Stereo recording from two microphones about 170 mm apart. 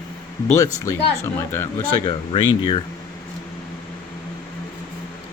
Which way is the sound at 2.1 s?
30° left (ahead or behind).